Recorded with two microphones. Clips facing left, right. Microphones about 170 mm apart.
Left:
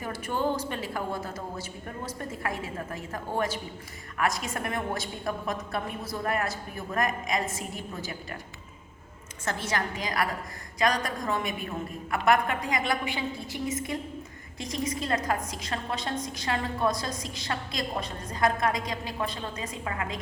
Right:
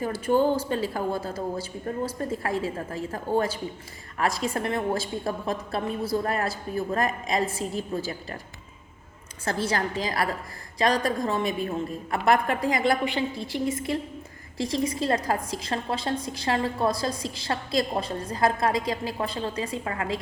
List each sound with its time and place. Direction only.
0.0 s a woman's voice: 30° right (ahead or behind)
9.4 s a woman's voice: 30° right (ahead or behind)
14.6 s a woman's voice: 30° right (ahead or behind)